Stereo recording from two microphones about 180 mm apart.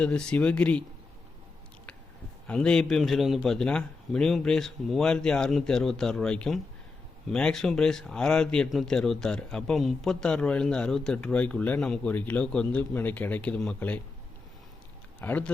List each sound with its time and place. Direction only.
0.0 s speech: 5° left (ahead or behind)
2.5 s speech: 5° left (ahead or behind)
15.2 s speech: 10° left (ahead or behind)